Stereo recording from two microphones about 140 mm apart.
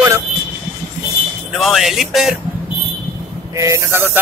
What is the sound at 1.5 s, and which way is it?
Speech, centre (ahead or behind).